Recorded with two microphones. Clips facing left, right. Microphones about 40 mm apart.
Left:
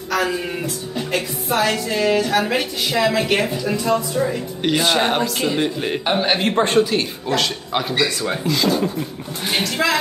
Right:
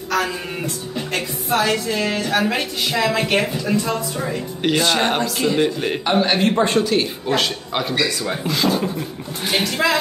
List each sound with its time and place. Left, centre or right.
0.1 s music: centre
0.9 s a man's voice: centre
6.5 s speech: left
8.5 s speech: centre